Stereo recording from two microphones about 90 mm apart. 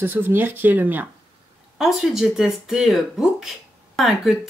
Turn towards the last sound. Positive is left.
turn(degrees=0)  # may be behind; listen again after turning